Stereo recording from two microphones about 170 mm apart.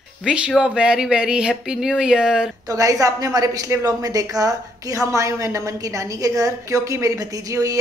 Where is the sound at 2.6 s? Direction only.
20° right (ahead or behind).